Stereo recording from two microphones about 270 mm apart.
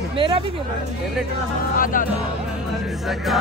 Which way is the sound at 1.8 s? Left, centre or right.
Left.